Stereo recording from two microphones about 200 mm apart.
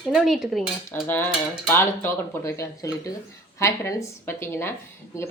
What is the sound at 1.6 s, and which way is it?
Speech, 10° left (ahead or behind).